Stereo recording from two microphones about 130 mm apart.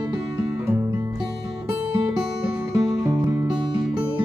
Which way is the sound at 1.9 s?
10° right (ahead or behind).